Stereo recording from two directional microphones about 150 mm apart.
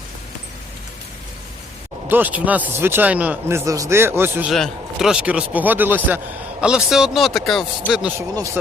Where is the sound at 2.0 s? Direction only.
10° right (ahead or behind).